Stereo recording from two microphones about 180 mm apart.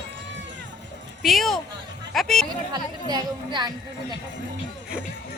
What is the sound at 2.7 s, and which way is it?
Speech, 25° right (ahead or behind).